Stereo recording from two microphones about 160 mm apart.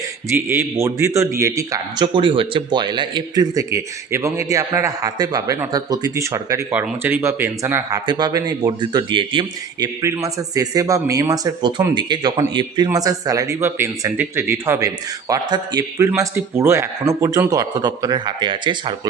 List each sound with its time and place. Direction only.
0.3 s a man's voice: 15° right (ahead or behind); by 9.9 s 30° right (ahead or behind)
10.0 s a man's voice: 20° right (ahead or behind)